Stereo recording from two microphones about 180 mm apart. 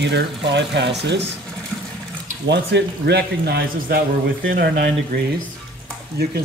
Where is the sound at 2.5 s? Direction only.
70° right (ahead or behind).